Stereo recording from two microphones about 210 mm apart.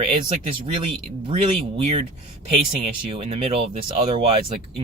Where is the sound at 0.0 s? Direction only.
25° right (ahead or behind).